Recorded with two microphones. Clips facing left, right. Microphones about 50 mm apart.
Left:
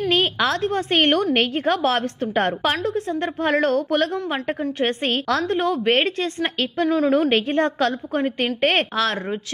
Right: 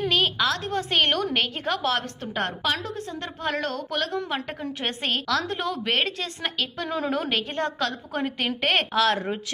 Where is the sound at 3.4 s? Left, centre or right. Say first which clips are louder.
Left 8 dB; left.